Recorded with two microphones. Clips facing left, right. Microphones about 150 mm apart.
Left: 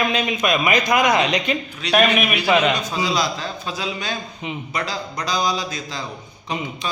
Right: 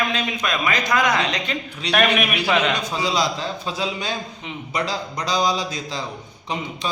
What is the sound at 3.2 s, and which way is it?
A man's voice, 25° right (ahead or behind).